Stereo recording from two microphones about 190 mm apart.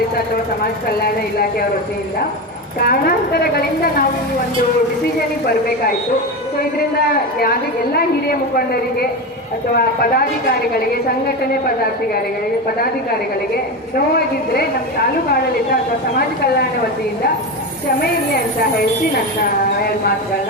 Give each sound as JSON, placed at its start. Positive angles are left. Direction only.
{"t": 1.0, "sound": "speech", "side_deg": 50}
{"t": 2.8, "sound": "a woman's voice", "side_deg": 55}
{"t": 7.9, "sound": "a woman's voice", "side_deg": 55}